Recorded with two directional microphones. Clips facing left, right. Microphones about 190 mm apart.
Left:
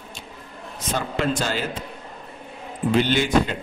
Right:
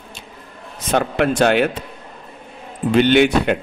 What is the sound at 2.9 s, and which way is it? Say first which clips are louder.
Speech: right 6 dB; 65° right (ahead or behind).